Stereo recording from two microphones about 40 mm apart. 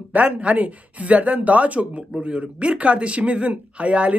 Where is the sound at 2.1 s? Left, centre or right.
Right.